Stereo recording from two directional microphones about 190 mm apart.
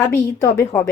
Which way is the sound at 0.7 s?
5° left (ahead or behind).